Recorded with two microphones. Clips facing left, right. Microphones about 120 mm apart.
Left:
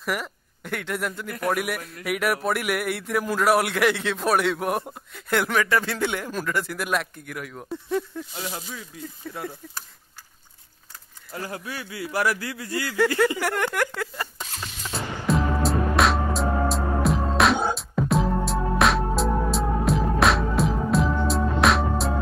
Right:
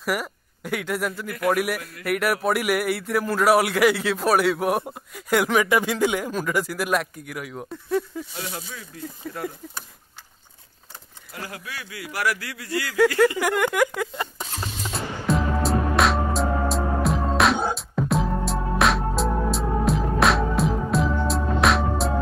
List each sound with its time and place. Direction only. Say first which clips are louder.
0.0 s speech: right 2 dB; 5° right (ahead or behind)
8.4 s a man's voice: left 2 dB; 25° left (ahead or behind)
9.2 s speech: right 2 dB; 5° right (ahead or behind)
11.3 s a man's voice: left 3 dB; 30° left (ahead or behind)
12.8 s speech: right 3 dB; centre (ahead or behind)
13.7 s speech: right 4 dB; 10° right (ahead or behind)
15.0 s music: even; centre (ahead or behind)